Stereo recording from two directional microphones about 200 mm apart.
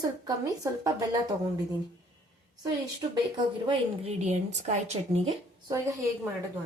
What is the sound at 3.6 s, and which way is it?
A woman's voice, 30° right (ahead or behind).